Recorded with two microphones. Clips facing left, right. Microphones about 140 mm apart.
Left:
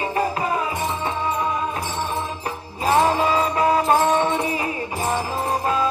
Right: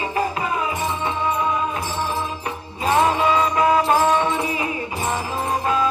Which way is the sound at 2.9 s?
35° left (ahead or behind).